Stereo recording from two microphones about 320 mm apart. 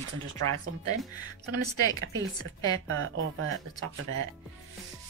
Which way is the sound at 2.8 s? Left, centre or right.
Right.